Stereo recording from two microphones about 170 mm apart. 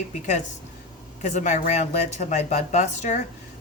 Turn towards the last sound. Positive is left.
turn(degrees=45)  # may be behind; listen again after turning